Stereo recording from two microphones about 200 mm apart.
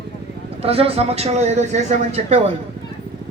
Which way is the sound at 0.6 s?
30° right (ahead or behind).